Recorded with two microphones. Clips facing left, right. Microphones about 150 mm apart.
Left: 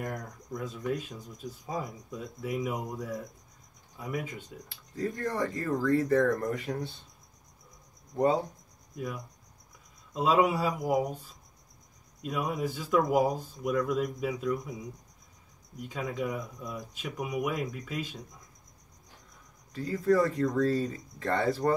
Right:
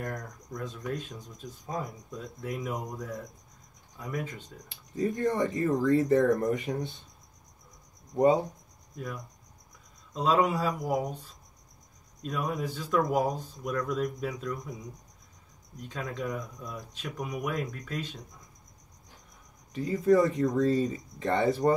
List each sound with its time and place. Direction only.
0.0 s speech: 5° left (ahead or behind)
4.6 s speech: 20° right (ahead or behind)
8.1 s speech: 20° right (ahead or behind)
8.9 s cricket: 5° left (ahead or behind)
10.1 s speech: 5° left (ahead or behind)
12.2 s speech: 5° left (ahead or behind)
15.8 s speech: 10° left (ahead or behind)
19.7 s speech: 20° right (ahead or behind)